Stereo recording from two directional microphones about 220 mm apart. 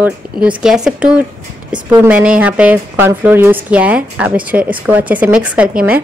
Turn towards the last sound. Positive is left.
turn(degrees=-5)  # may be behind; listen again after turning